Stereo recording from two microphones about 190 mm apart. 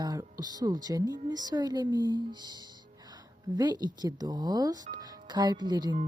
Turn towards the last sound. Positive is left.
turn(degrees=-20)  # may be behind; listen again after turning